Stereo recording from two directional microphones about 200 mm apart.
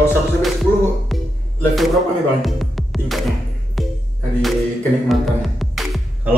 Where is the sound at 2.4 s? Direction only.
Centre (ahead or behind).